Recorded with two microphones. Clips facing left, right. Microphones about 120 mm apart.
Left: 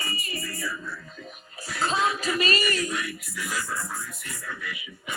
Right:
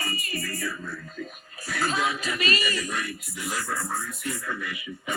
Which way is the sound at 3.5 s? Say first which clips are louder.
Right 3 dB; 55° right (ahead or behind).